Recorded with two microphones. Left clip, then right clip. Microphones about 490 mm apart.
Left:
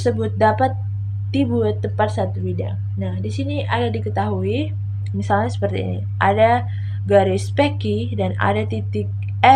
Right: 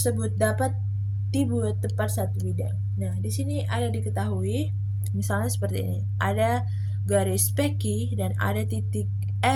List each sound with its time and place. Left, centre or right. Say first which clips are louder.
0.0 s speech: left 9 dB; right